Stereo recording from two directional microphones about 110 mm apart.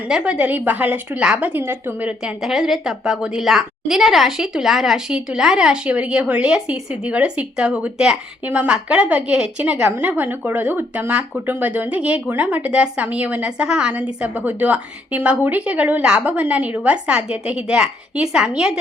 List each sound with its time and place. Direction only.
0.1 s a woman's voice: 10° right (ahead or behind)